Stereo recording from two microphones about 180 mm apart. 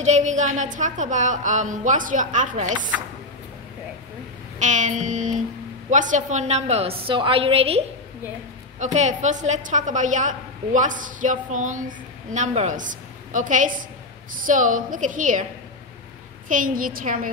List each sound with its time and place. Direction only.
0.0 s a woman's voice: 40° right (ahead or behind)
4.6 s a woman's voice: 40° right (ahead or behind)
16.4 s a woman's voice: 50° right (ahead or behind)